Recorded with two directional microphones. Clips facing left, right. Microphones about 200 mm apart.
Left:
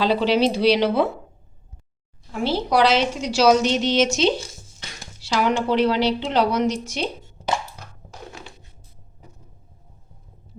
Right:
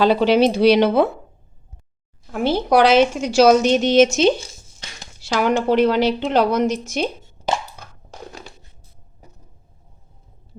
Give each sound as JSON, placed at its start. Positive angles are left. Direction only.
{"t": 0.0, "sound": "a woman's voice", "side_deg": -50}
{"t": 2.3, "sound": "a woman's voice", "side_deg": -50}